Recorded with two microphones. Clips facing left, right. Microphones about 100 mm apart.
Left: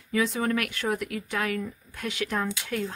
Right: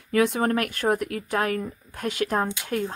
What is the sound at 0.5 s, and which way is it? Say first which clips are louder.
Speech: right 4 dB; 40° right (ahead or behind).